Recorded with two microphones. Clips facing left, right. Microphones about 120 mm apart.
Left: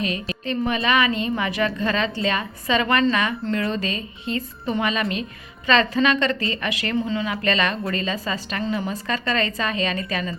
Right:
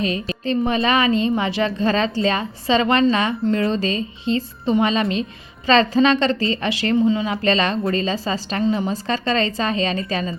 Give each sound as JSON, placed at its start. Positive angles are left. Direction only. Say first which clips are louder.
{"t": 0.0, "sound": "a woman's voice", "louder": "right 4 dB", "side_deg": -30}
{"t": 8.6, "sound": "a woman's voice", "louder": "right 6 dB", "side_deg": -20}
{"t": 8.9, "sound": "a woman's voice", "louder": "right 4 dB", "side_deg": -30}